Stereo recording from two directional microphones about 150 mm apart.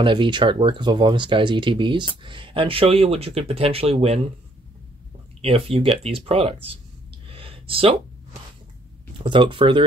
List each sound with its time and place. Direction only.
0.0 s speech: 35° right (ahead or behind)
5.4 s speech: 40° right (ahead or behind)
7.2 s gasp: 35° right (ahead or behind)
9.2 s speech: 35° right (ahead or behind)